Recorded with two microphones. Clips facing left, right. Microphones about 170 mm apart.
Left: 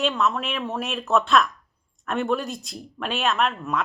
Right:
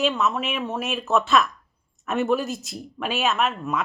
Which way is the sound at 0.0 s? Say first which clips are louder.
Right 1 dB; centre (ahead or behind).